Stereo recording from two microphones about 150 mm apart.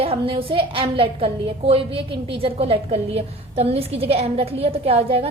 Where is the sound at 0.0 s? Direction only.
40° right (ahead or behind).